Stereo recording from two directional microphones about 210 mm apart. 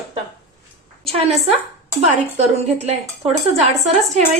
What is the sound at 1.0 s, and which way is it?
Speech, 30° right (ahead or behind).